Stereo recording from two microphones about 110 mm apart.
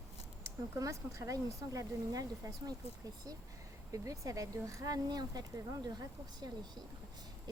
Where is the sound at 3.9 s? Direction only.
30° right (ahead or behind).